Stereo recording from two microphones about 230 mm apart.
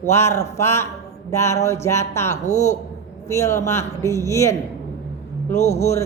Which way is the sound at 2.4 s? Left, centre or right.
Left.